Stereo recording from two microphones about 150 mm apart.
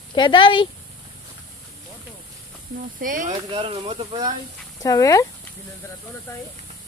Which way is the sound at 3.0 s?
65° right (ahead or behind).